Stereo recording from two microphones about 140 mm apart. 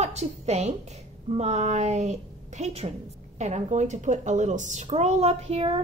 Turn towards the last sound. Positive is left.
turn(degrees=-45)  # may be behind; listen again after turning